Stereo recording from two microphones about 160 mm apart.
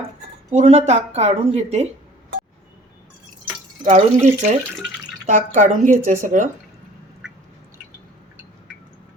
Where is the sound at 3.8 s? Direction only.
50° right (ahead or behind).